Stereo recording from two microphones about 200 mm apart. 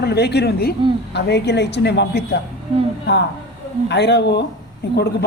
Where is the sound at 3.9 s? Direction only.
55° left (ahead or behind).